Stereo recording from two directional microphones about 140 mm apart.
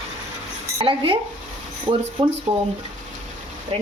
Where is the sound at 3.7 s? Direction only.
45° right (ahead or behind).